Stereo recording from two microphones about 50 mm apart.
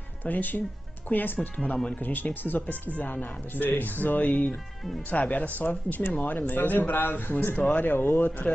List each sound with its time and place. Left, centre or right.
0.2 s speech: left